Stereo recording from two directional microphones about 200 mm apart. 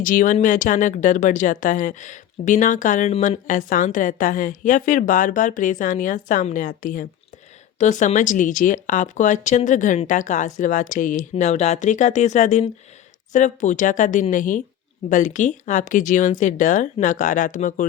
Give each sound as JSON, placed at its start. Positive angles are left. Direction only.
{"t": 0.0, "sound": "speech", "side_deg": 40}